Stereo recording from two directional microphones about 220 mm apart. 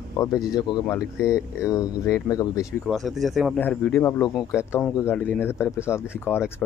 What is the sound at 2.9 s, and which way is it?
Speech, centre (ahead or behind).